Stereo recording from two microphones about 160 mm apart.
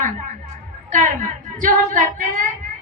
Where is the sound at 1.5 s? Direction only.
55° right (ahead or behind).